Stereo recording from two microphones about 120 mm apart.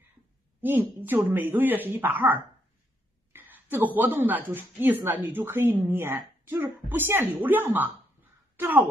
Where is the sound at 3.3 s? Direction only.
15° right (ahead or behind).